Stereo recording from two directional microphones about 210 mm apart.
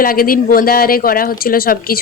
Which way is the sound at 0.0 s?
45° left (ahead or behind).